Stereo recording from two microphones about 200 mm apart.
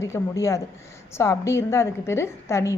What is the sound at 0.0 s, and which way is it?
A woman's voice, 15° left (ahead or behind).